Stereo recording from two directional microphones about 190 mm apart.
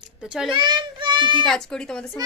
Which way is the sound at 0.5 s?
25° right (ahead or behind).